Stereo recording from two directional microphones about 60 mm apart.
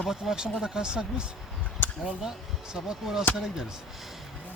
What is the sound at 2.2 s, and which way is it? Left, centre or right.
Speech, centre.